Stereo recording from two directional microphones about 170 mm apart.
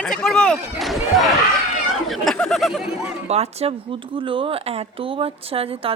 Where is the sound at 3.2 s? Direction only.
40° right (ahead or behind).